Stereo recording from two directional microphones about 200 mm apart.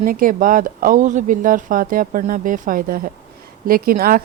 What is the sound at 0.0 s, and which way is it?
Speech, 45° right (ahead or behind).